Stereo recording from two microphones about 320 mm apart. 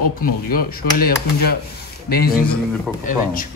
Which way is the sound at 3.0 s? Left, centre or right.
Left.